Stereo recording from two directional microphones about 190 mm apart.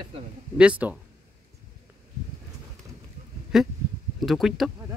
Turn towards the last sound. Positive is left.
turn(degrees=0)  # may be behind; listen again after turning